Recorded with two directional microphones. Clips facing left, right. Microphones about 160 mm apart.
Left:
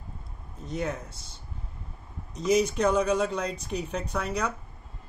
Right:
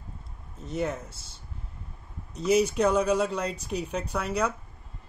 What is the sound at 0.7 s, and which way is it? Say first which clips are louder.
Speech: right 2 dB; 5° right (ahead or behind).